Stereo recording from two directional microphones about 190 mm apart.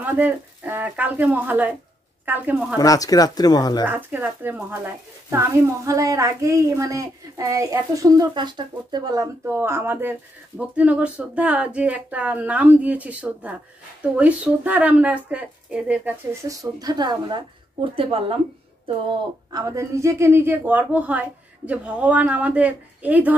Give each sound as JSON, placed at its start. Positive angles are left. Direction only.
{"t": 0.0, "sound": "a child's voice", "side_deg": -10}
{"t": 2.8, "sound": "speech", "side_deg": 20}
{"t": 3.8, "sound": "a child's voice", "side_deg": -10}
{"t": 16.8, "sound": "a woman's voice", "side_deg": -20}
{"t": 19.5, "sound": "a child's voice", "side_deg": -15}